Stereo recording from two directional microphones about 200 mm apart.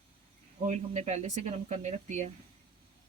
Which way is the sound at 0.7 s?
35° right (ahead or behind).